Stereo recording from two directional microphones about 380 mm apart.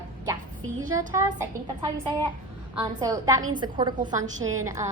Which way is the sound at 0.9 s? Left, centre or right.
Centre.